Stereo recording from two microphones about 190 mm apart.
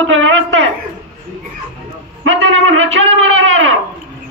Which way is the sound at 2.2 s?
90° right.